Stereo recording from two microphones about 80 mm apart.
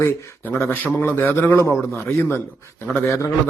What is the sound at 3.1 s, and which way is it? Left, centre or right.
Speech, left.